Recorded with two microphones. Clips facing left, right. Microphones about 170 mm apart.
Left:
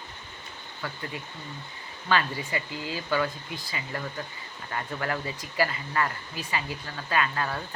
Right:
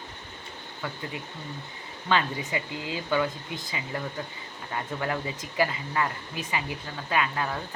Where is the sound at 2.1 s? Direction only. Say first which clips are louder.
Even; 20° right (ahead or behind).